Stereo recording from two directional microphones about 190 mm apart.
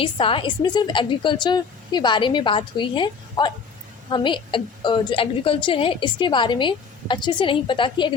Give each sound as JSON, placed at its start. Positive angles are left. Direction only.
{"t": 0.0, "sound": "a woman's voice", "side_deg": 30}